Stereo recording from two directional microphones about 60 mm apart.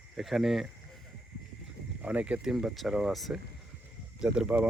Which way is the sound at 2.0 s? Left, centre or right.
Right.